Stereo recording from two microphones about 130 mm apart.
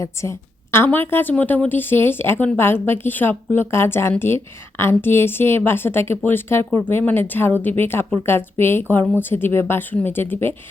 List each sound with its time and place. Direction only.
0.0 s a woman's voice: 20° left (ahead or behind)